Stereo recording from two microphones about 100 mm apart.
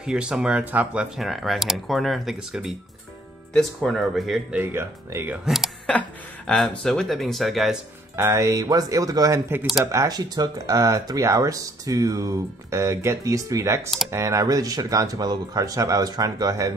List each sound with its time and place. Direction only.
0.0 s speech: 10° right (ahead or behind)
1.1 s speech: centre (ahead or behind)
4.5 s speech: 20° right (ahead or behind)
5.3 s speech: 5° right (ahead or behind)
5.9 s speech: 10° left (ahead or behind)
8.2 s speech: 30° right (ahead or behind)